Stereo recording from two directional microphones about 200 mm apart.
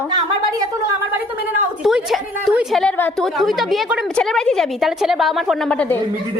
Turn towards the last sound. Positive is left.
turn(degrees=5)  # may be behind; listen again after turning